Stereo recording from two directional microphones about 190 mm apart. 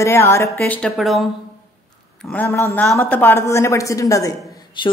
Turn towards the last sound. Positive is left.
turn(degrees=25)  # may be behind; listen again after turning